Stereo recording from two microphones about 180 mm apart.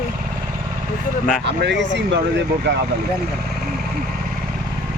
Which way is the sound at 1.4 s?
75° right (ahead or behind).